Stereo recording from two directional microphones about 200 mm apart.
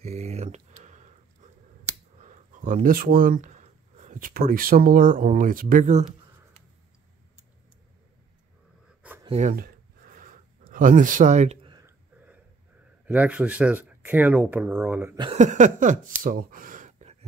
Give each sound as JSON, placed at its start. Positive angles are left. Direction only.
{"t": 0.0, "sound": "a sound", "side_deg": -35}
{"t": 2.1, "sound": "speech", "side_deg": -40}
{"t": 9.2, "sound": "a sound", "side_deg": -35}
{"t": 10.7, "sound": "speech", "side_deg": -40}
{"t": 11.7, "sound": "clicking", "side_deg": -15}
{"t": 13.0, "sound": "speech", "side_deg": -5}
{"t": 15.3, "sound": "speech", "side_deg": -40}